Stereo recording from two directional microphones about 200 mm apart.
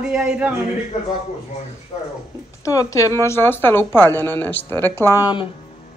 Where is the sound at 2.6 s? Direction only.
15° left (ahead or behind).